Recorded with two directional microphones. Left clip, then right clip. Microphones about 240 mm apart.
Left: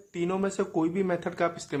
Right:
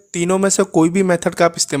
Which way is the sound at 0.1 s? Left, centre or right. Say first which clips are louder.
Right 12 dB; right.